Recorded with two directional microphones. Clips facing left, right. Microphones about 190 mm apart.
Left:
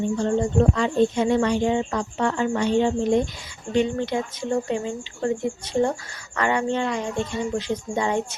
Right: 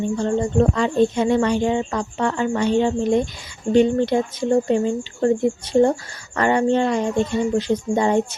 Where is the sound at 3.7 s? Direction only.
40° right (ahead or behind).